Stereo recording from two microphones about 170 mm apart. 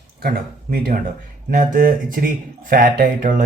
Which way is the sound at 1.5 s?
55° right (ahead or behind).